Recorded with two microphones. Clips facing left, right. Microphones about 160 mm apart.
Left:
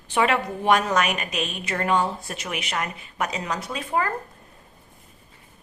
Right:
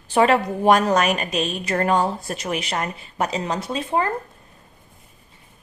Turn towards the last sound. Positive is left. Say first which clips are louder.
# right 3 dB
turn(degrees=-25)  # may be behind; listen again after turning